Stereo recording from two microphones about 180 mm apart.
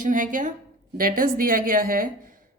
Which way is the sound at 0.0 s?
45° right (ahead or behind).